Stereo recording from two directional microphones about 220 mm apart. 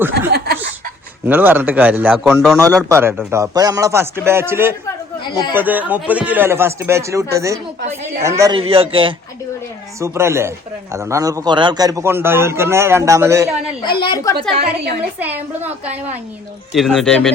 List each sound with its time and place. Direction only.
0.3 s chuckle: 45° right (ahead or behind)
1.3 s a man's voice: 10° right (ahead or behind)
2.6 s a man's voice: 15° right (ahead or behind)
10.0 s a man's voice: 10° right (ahead or behind)
13.8 s a woman's voice: 20° left (ahead or behind)
14.6 s a woman's voice: 45° right (ahead or behind)
15.2 s a man's voice: 5° right (ahead or behind)
16.7 s a man's voice: centre (ahead or behind)